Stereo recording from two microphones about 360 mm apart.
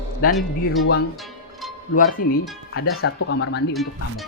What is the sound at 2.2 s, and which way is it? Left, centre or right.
Speech, left.